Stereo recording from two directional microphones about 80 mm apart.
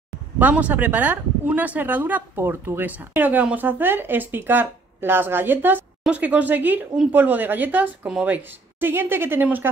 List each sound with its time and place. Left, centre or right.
0.4 s speech: centre
8.4 s speech: right